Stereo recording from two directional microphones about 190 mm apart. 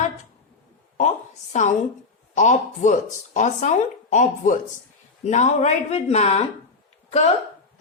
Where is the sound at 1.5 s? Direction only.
40° left (ahead or behind).